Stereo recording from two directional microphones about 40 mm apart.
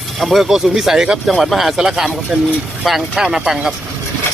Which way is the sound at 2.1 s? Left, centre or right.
Right.